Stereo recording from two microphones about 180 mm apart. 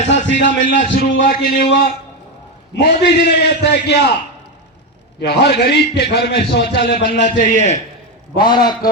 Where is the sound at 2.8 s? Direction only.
65° left (ahead or behind).